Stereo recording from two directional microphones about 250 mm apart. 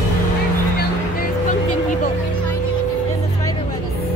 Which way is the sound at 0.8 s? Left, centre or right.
Left.